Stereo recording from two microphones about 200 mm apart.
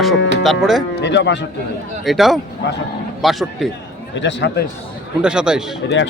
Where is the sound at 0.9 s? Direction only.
60° left (ahead or behind).